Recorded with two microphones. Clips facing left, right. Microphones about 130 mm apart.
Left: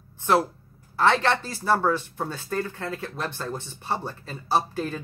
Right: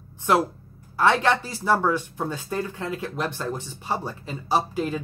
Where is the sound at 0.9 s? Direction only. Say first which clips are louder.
Right 1 dB; 15° right (ahead or behind).